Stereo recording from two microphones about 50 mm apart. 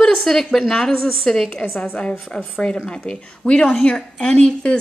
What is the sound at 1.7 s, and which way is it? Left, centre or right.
A woman's voice, left.